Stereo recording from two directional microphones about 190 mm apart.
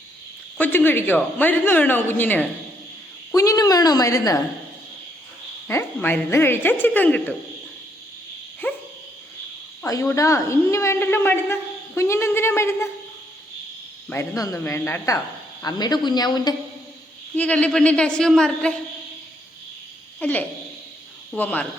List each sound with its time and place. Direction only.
0.5 s a woman's voice: 10° left (ahead or behind)
5.6 s speech: 10° left (ahead or behind)
8.6 s dog: 10° left (ahead or behind)
9.8 s speech: 15° left (ahead or behind)
14.1 s a woman's voice: 15° left (ahead or behind)
17.3 s a woman's voice: 5° left (ahead or behind)
20.1 s a sound: 10° left (ahead or behind)
21.2 s speech: 10° left (ahead or behind)